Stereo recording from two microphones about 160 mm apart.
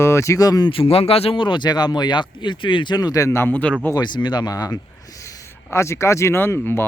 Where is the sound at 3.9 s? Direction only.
25° left (ahead or behind).